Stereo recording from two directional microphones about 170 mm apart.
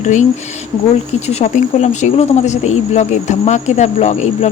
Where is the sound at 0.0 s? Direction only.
45° left (ahead or behind).